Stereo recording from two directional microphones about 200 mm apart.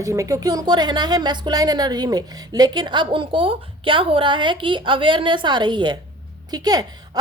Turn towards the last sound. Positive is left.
turn(degrees=-20)  # may be behind; listen again after turning